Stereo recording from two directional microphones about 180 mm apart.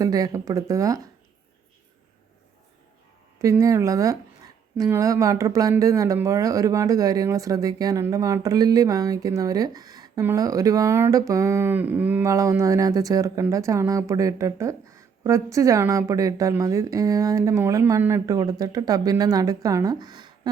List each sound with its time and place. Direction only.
0.0 s speech: 20° right (ahead or behind)
3.3 s speech: 15° right (ahead or behind)